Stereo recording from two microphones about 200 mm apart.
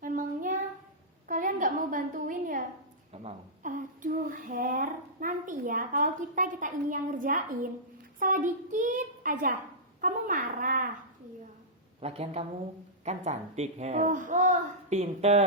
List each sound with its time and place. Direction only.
0.0 s child singing: 40° right (ahead or behind)
1.3 s a sound: 40° right (ahead or behind)
11.9 s a woman's voice: 30° right (ahead or behind)